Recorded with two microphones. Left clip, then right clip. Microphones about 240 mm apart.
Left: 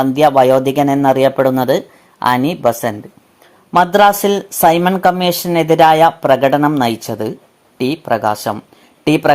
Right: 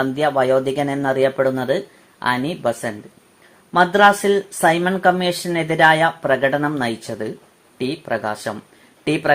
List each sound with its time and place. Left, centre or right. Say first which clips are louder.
0.0 s speech: left 8 dB; left